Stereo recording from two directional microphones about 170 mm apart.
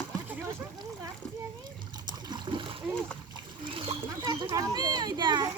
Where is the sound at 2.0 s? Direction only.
25° right (ahead or behind).